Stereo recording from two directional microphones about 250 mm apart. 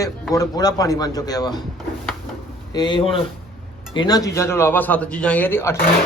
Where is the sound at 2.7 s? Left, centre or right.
Centre.